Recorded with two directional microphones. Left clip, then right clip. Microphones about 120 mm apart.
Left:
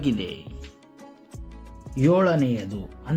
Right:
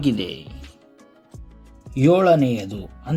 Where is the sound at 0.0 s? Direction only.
45° right (ahead or behind).